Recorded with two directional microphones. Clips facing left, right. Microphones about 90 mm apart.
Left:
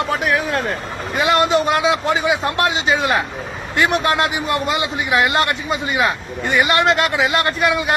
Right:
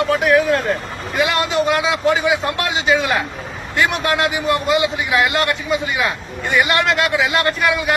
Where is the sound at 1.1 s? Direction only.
30° left (ahead or behind).